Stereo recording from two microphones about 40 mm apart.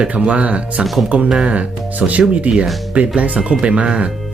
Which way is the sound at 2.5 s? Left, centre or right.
Right.